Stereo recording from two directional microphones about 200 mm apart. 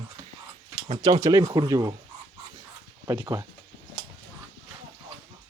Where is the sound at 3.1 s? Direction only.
15° right (ahead or behind).